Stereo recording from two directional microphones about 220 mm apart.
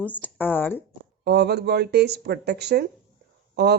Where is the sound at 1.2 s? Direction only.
50° right (ahead or behind).